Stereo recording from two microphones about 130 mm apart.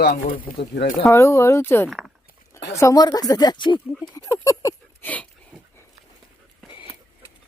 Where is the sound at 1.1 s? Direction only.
20° left (ahead or behind); by 3.8 s 35° left (ahead or behind).